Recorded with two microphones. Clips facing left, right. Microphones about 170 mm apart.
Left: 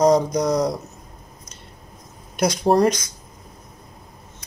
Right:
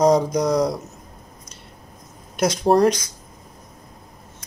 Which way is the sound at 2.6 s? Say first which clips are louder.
Right 1 dB; centre (ahead or behind).